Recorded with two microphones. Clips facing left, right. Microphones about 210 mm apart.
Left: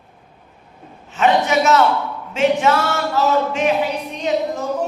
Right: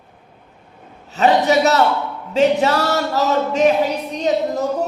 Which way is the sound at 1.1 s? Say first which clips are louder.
Right 2 dB; 35° right (ahead or behind).